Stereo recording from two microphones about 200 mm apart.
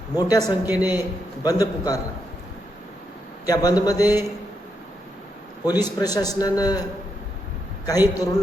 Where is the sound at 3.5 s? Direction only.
20° left (ahead or behind).